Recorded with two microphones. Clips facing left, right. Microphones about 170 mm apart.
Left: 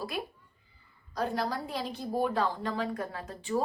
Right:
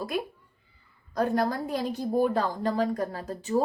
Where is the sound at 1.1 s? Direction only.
50° right (ahead or behind).